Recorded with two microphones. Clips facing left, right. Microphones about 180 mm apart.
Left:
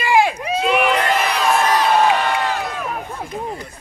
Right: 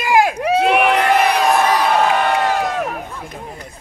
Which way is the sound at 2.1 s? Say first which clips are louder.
Right 2 dB; 50° right (ahead or behind).